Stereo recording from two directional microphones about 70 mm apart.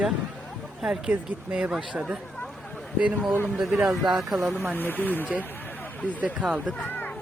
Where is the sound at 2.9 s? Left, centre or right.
Centre.